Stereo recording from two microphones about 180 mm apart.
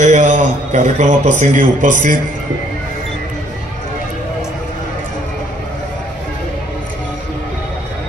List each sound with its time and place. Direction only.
0.0 s a man's voice: 40° right (ahead or behind)